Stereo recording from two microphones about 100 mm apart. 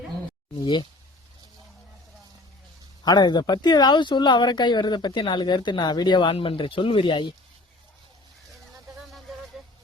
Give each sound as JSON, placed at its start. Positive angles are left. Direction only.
{"t": 0.5, "sound": "speech", "side_deg": 50}
{"t": 3.0, "sound": "speech", "side_deg": 45}